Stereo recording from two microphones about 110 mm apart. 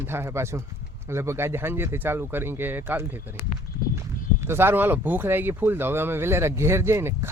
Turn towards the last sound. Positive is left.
turn(degrees=-25)  # may be behind; listen again after turning